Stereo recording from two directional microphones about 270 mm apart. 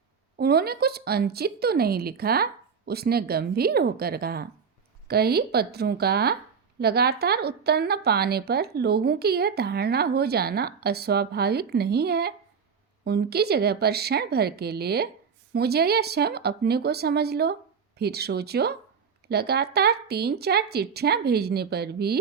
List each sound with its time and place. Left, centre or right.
0.3 s a woman's voice: right